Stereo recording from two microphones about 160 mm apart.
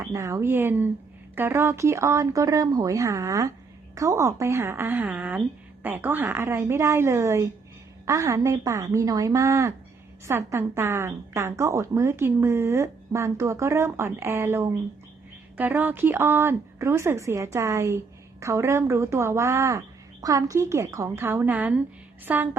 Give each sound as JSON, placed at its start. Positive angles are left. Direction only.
{"t": 0.0, "sound": "a woman's voice", "side_deg": -20}